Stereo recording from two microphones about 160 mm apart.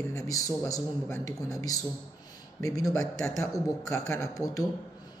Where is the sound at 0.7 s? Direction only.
20° left (ahead or behind).